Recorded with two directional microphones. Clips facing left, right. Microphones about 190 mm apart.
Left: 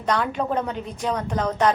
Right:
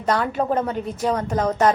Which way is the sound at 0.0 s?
5° right (ahead or behind).